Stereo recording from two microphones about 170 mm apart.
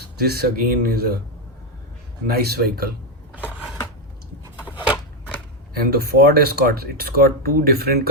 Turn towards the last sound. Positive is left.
turn(degrees=-65)  # may be behind; listen again after turning